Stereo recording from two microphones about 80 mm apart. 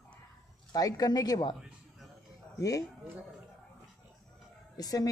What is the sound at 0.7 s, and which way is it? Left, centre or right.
Speech, left.